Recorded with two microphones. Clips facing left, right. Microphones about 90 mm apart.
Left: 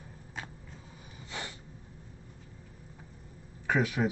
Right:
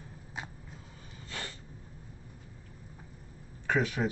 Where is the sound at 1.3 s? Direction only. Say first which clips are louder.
Left 1 dB; 15° left (ahead or behind).